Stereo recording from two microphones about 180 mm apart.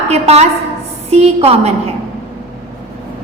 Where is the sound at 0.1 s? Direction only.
35° right (ahead or behind).